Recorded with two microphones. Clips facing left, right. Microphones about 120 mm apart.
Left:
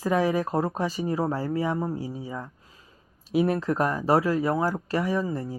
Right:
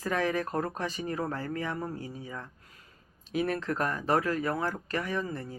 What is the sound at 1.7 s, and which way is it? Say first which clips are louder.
Speech: left 7 dB; 25° left (ahead or behind).